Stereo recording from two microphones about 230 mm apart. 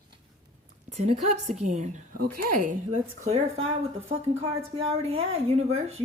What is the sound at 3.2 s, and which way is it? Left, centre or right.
Speech, right.